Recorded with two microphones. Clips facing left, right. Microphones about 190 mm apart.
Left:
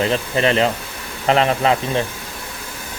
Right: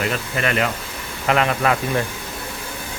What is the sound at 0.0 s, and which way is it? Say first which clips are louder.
Speech: left 5 dB; 30° left (ahead or behind).